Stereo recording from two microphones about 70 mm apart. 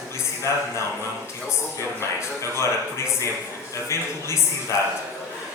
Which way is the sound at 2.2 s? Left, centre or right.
Left.